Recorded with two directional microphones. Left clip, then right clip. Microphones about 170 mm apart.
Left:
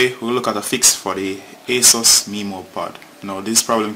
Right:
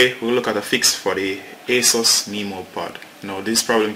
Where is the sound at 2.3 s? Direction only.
55° left (ahead or behind).